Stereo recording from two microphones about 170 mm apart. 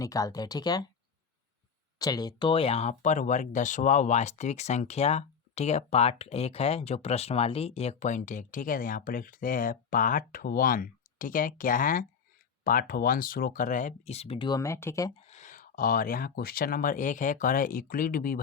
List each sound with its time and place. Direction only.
0.0 s speech: 20° left (ahead or behind)
2.0 s speech: 25° left (ahead or behind)
15.2 s speech: 40° left (ahead or behind)